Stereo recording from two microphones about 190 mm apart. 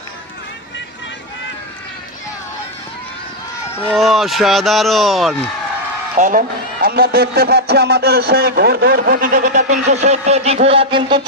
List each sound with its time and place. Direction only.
3.9 s speech: centre (ahead or behind)
6.1 s a man's voice: 40° right (ahead or behind)
6.8 s a man's voice: 55° right (ahead or behind); by 11.2 s 30° right (ahead or behind)